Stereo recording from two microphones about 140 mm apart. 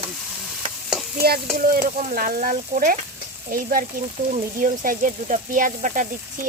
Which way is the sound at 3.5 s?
90° right.